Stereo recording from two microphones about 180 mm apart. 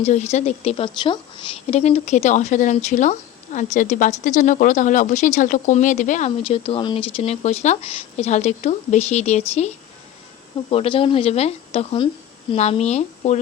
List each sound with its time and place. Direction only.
0.0 s speech: 40° left (ahead or behind)
10.7 s speech: 30° left (ahead or behind)